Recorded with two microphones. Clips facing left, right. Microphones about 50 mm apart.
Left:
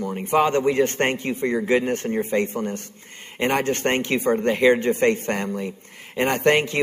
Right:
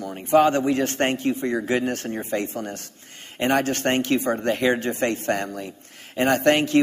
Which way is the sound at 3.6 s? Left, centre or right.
Centre.